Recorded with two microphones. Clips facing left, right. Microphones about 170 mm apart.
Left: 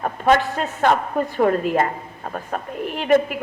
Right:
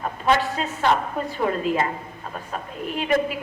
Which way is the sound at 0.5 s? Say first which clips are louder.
Left 3 dB; 50° left (ahead or behind).